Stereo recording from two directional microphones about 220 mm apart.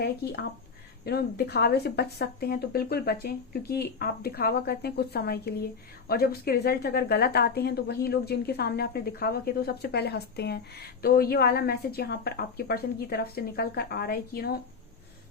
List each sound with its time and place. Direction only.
1.0 s a woman's voice: 45° left (ahead or behind)